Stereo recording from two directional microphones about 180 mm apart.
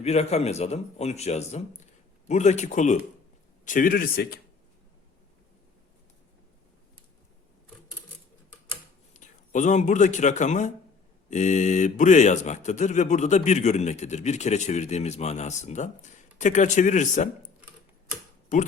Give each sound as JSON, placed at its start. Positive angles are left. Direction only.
{"t": 0.0, "sound": "a man's voice", "side_deg": 35}
{"t": 9.1, "sound": "speech", "side_deg": 40}